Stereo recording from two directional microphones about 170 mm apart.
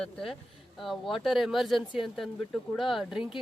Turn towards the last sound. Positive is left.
turn(degrees=0)  # may be behind; listen again after turning